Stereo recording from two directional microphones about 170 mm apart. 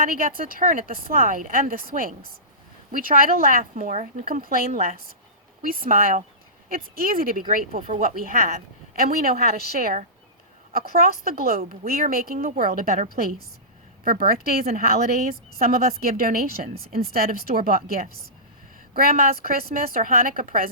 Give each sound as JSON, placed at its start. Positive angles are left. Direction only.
{"t": 0.0, "sound": "a woman's voice", "side_deg": -55}
{"t": 9.0, "sound": "a woman's voice", "side_deg": -60}